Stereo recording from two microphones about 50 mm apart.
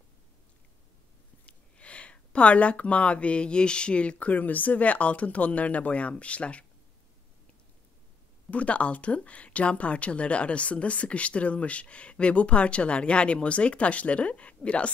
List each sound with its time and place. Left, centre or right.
1.4 s speech: left
8.5 s speech: left